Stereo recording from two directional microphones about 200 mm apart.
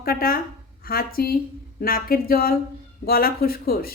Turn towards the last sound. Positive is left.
turn(degrees=50)  # may be behind; listen again after turning